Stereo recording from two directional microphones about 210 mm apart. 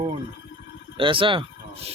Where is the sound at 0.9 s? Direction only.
25° right (ahead or behind).